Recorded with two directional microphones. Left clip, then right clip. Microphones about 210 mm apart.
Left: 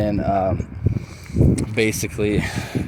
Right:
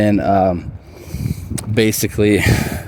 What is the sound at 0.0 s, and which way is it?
Speech, 55° right (ahead or behind).